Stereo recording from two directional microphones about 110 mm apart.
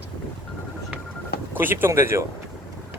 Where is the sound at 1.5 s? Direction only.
20° right (ahead or behind).